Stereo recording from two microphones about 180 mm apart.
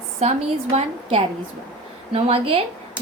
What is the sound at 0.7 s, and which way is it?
A woman's voice, 35° right (ahead or behind).